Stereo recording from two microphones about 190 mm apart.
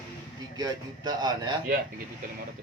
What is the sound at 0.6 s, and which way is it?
Speech, 20° right (ahead or behind).